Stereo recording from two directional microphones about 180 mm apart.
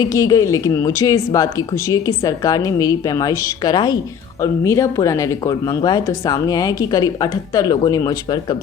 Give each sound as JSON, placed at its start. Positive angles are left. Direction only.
{"t": 0.0, "sound": "speech", "side_deg": 20}